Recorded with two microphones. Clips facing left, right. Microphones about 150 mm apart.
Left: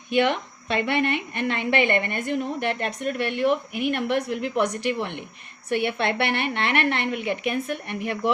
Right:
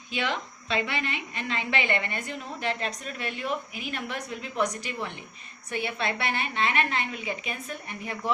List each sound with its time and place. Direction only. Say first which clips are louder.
0.1 s a woman's voice: left 9 dB; 60° left (ahead or behind)